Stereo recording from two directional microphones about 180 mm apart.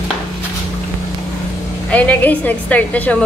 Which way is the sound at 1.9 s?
10° left (ahead or behind).